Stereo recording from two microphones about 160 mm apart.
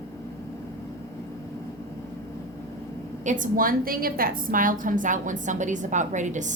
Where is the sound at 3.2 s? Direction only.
55° right (ahead or behind).